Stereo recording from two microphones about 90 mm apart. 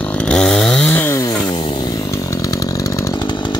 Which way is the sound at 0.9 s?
25° left (ahead or behind).